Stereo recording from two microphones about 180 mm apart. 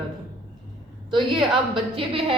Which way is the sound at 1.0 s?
25° right (ahead or behind).